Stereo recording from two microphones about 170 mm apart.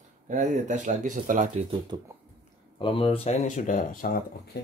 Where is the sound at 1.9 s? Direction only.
25° right (ahead or behind).